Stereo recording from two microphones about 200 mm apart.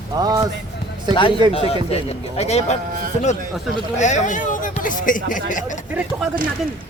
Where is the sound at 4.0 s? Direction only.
35° left (ahead or behind).